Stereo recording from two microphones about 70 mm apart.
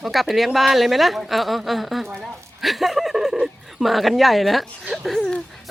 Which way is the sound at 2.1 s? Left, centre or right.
Centre.